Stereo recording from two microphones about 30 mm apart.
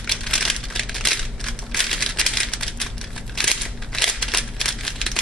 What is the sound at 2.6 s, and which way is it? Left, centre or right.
Crumpling, centre.